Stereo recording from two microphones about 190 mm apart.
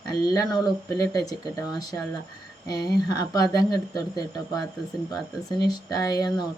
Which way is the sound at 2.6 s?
20° left (ahead or behind).